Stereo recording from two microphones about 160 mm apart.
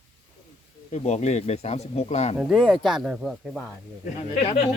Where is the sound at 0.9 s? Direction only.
45° left (ahead or behind).